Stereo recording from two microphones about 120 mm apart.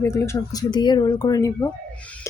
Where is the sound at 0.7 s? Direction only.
40° left (ahead or behind).